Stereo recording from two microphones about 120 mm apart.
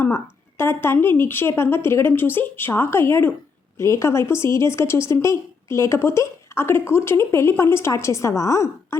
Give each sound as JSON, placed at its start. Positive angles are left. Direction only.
{"t": 0.0, "sound": "a woman's voice", "side_deg": 20}